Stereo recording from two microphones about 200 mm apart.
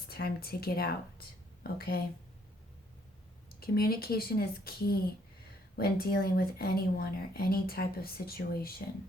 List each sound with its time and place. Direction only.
0.1 s speech: 50° left (ahead or behind)
3.6 s speech: 50° left (ahead or behind)